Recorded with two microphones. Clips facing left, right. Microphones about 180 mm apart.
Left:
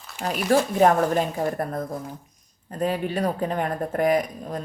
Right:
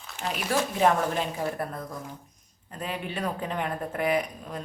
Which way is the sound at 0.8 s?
45° left (ahead or behind).